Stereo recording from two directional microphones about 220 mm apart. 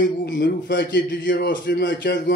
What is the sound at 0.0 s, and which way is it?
A man's voice, 50° left (ahead or behind).